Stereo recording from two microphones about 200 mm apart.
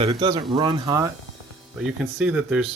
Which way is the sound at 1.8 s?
5° right (ahead or behind).